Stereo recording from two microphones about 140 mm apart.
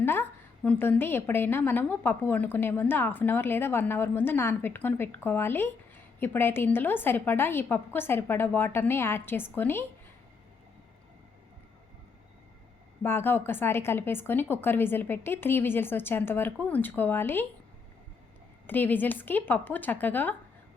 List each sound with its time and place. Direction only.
0.0 s a woman's voice: 15° left (ahead or behind)
13.0 s a woman's voice: 15° left (ahead or behind)
18.7 s a woman's voice: 15° left (ahead or behind)